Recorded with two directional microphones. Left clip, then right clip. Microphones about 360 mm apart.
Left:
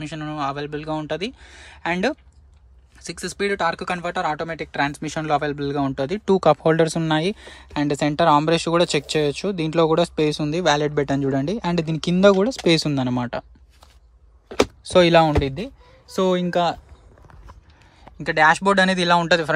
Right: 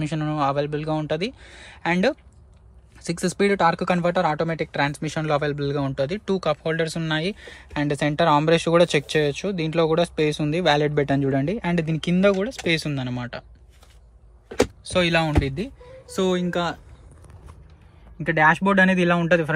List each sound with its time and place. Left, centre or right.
0.0 s speech: centre
14.5 s speech: left
18.1 s speech: centre